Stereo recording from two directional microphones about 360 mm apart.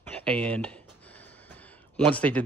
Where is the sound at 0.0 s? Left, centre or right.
Centre.